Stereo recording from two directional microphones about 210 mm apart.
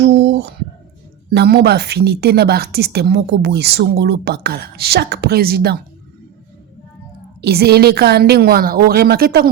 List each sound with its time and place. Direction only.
0.0 s a sound: 55° right (ahead or behind)
1.3 s speech: 50° right (ahead or behind)
7.4 s speech: 50° right (ahead or behind)